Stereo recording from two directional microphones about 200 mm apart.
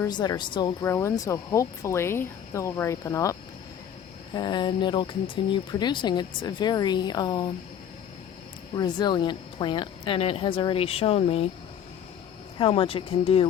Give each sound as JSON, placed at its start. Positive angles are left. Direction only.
{"t": 0.0, "sound": "speech", "side_deg": 20}
{"t": 4.4, "sound": "speech", "side_deg": 20}
{"t": 8.7, "sound": "speech", "side_deg": 20}
{"t": 12.5, "sound": "speech", "side_deg": 25}